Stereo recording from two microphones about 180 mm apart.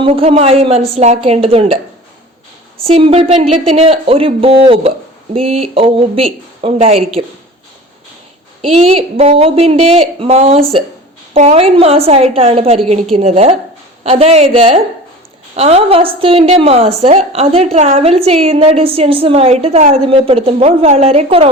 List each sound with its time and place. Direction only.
0.0 s a woman's voice: 35° right (ahead or behind)
2.7 s a woman's voice: 30° right (ahead or behind)
8.6 s a woman's voice: 30° right (ahead or behind)